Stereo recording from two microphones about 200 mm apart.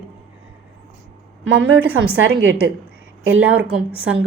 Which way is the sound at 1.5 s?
10° right (ahead or behind).